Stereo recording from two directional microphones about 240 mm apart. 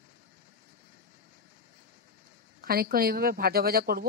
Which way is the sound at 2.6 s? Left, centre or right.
Right.